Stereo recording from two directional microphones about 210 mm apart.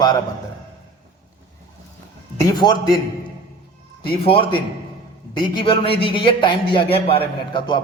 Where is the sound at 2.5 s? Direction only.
20° left (ahead or behind).